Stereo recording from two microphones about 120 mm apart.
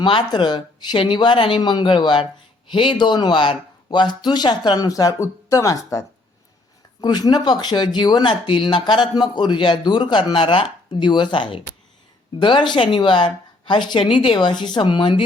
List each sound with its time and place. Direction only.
0.0 s speech: 45° left (ahead or behind)